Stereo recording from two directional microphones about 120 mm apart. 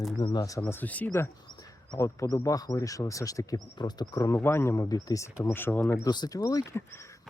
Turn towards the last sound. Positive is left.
turn(degrees=25)  # may be behind; listen again after turning